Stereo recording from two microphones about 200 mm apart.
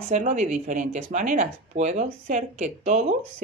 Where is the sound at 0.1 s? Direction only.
35° right (ahead or behind).